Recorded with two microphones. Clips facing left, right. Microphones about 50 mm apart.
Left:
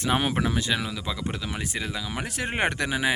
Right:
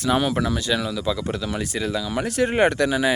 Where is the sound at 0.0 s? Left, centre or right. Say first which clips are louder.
Right 4 dB; left.